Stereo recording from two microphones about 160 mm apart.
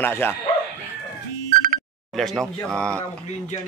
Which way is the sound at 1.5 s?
60° right (ahead or behind).